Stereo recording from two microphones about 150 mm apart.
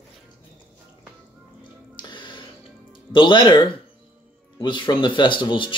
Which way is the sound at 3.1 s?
35° left (ahead or behind).